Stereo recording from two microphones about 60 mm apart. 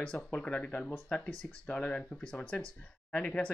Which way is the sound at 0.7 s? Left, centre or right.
Left.